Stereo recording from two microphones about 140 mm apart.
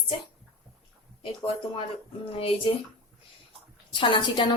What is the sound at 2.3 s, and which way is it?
Speech, 40° left (ahead or behind).